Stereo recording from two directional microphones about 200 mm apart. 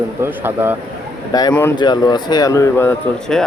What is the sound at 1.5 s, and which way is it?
Speech, 10° left (ahead or behind).